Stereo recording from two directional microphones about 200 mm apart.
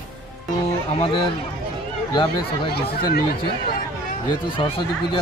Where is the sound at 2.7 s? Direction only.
50° left (ahead or behind).